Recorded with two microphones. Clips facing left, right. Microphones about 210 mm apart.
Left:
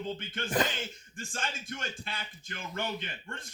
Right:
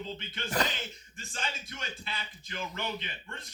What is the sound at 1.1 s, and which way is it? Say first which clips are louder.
A man's voice: left 1 dB; 50° left (ahead or behind).